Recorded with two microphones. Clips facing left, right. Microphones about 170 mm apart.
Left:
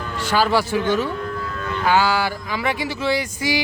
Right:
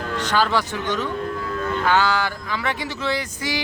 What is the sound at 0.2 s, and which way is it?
Speech, 10° left (ahead or behind).